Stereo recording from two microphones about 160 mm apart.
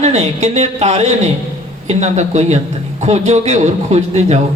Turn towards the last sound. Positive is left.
turn(degrees=-45)  # may be behind; listen again after turning